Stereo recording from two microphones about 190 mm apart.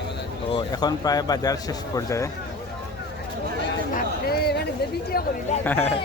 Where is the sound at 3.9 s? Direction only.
55° left (ahead or behind).